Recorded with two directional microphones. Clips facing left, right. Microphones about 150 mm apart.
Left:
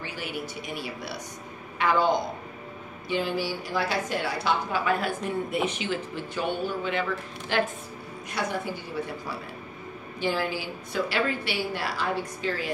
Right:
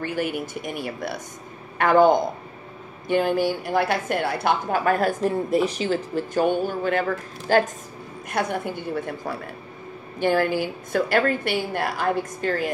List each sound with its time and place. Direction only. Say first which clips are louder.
0.0 s a woman's voice: right 8 dB; 50° right (ahead or behind)
8.3 s a woman's voice: right 5 dB; 55° right (ahead or behind)